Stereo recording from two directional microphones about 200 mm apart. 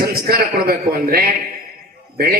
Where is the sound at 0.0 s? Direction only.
50° right (ahead or behind).